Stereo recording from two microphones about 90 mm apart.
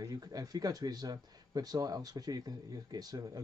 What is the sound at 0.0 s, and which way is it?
Speech, 45° right (ahead or behind).